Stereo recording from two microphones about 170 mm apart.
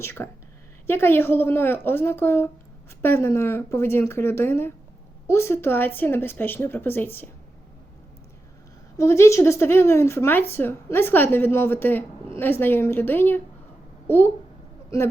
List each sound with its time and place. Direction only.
0.0 s speech: 15° left (ahead or behind)
9.0 s speech: 15° left (ahead or behind)
14.8 s speech: 15° left (ahead or behind)